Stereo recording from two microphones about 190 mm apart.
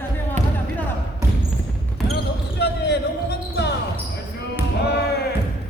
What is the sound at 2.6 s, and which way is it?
Basketball bounce, 60° left (ahead or behind).